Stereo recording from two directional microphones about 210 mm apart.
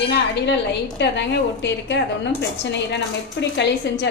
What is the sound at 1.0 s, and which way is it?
A woman's voice, 55° left (ahead or behind).